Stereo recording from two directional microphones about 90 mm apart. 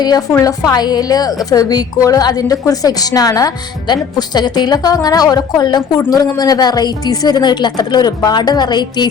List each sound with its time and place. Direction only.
0.0 s a woman's voice: 45° left (ahead or behind)